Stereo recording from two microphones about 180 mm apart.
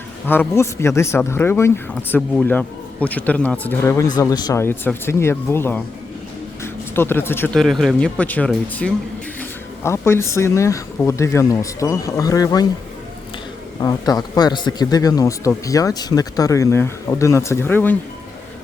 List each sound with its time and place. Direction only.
0.3 s speech: 15° left (ahead or behind)
6.9 s speech: 10° left (ahead or behind)
13.8 s speech: 20° left (ahead or behind)